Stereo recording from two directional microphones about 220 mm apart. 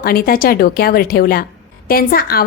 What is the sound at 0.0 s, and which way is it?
A woman's voice, 40° left (ahead or behind).